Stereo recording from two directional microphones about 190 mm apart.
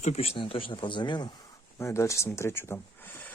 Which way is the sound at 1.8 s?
15° left (ahead or behind).